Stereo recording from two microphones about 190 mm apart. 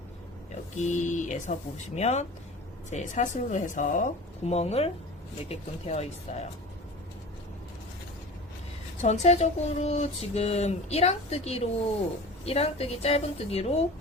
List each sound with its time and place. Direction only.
0.5 s speech: 40° left (ahead or behind)
9.0 s speech: 35° left (ahead or behind)